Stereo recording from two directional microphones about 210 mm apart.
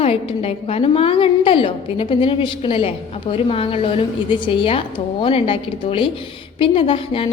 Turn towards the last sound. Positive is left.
turn(degrees=25)  # may be behind; listen again after turning